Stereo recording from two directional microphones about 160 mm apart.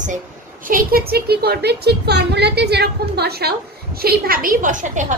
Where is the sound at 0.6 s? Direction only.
65° right (ahead or behind).